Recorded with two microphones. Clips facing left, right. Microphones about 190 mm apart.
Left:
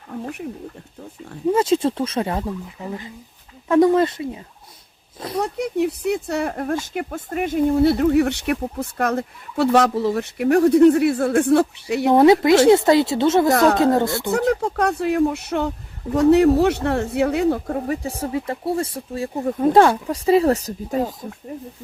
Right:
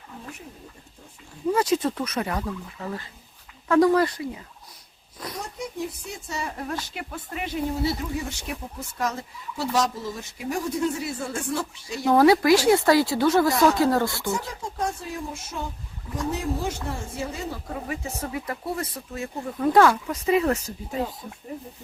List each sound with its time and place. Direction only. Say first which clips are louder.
0.1 s speech: left 12 dB; 60° left (ahead or behind)
1.5 s speech: left 5 dB; 25° left (ahead or behind)
5.4 s speech: left 12 dB; 65° left (ahead or behind)
12.1 s speech: left 4 dB; 20° left (ahead or behind)
13.5 s speech: left 4 dB; 55° left (ahead or behind)
13.7 s speech: left 5 dB; 20° left (ahead or behind)
14.3 s speech: left 10 dB; 65° left (ahead or behind); by 21.2 s 45° left (ahead or behind)